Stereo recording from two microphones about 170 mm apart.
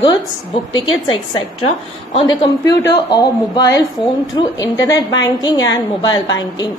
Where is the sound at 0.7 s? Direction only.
25° left (ahead or behind).